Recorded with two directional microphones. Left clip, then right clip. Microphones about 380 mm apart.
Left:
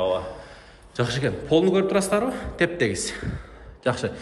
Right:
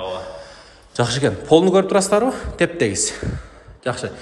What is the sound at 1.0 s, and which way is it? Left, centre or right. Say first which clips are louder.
A man's voice: right 6 dB; centre.